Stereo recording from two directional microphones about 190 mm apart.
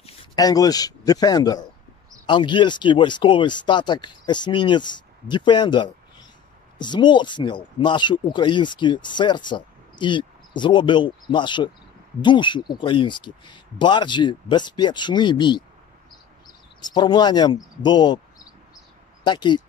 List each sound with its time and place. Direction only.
0.4 s speech: 20° left (ahead or behind)
16.8 s speech: 25° left (ahead or behind)